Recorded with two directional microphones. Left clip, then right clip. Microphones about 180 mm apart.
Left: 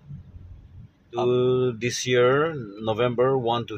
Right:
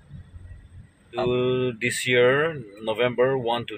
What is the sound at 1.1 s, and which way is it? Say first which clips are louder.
Speech: left 2 dB; 20° left (ahead or behind).